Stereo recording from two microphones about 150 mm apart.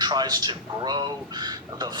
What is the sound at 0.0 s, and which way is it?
Speech, 30° right (ahead or behind).